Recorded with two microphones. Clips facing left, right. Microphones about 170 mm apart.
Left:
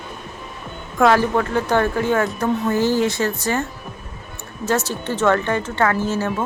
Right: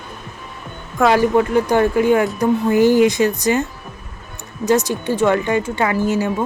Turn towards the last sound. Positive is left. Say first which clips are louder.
# right 2 dB
turn(degrees=-15)  # may be behind; listen again after turning